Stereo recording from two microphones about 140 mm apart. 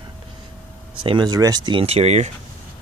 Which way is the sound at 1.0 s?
35° right (ahead or behind).